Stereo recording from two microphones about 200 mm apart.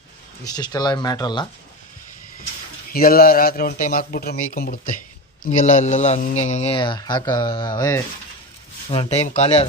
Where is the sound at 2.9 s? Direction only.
50° left (ahead or behind); by 8.0 s 20° left (ahead or behind).